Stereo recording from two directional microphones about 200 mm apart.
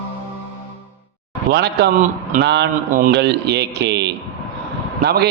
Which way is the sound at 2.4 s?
60° right (ahead or behind).